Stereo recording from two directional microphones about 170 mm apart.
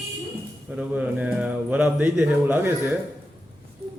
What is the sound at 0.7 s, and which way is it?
Speech, 5° right (ahead or behind).